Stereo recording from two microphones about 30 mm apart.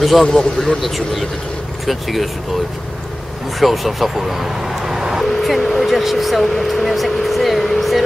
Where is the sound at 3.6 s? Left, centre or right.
Centre.